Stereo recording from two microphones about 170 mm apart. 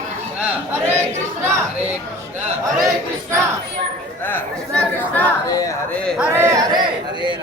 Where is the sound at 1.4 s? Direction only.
10° right (ahead or behind).